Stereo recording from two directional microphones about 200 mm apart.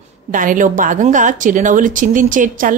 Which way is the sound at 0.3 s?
40° right (ahead or behind).